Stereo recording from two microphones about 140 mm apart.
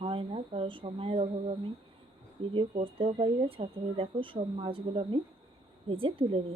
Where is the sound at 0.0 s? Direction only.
40° right (ahead or behind).